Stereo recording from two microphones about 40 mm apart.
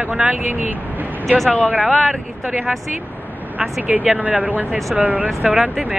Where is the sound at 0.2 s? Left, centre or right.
Right.